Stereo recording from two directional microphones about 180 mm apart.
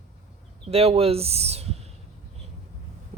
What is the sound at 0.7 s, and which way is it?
Speech, 35° right (ahead or behind).